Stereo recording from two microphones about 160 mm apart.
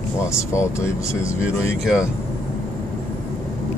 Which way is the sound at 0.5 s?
20° left (ahead or behind).